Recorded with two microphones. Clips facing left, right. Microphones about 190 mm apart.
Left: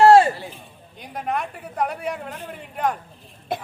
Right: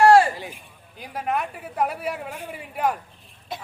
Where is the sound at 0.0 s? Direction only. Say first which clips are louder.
Left 2 dB; 25° left (ahead or behind).